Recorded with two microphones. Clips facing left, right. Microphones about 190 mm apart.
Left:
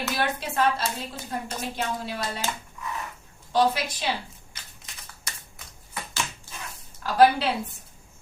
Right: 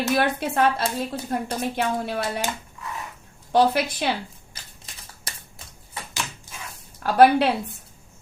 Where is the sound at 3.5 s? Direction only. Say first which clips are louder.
Right 4 dB; 60° right (ahead or behind).